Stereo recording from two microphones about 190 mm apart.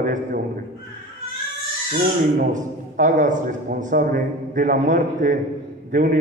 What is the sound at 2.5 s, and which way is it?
A man's voice, 40° right (ahead or behind).